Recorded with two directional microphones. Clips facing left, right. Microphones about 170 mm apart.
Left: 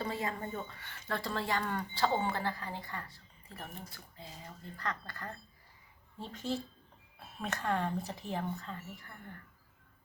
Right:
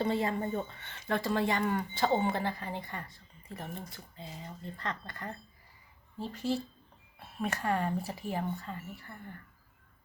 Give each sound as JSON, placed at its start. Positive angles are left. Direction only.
{"t": 0.0, "sound": "speech", "side_deg": -30}
{"t": 6.1, "sound": "speech", "side_deg": -5}